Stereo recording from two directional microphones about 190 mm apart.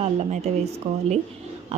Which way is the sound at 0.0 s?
35° right (ahead or behind).